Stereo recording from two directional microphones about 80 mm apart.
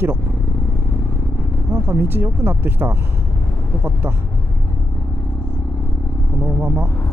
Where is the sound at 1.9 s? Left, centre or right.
Right.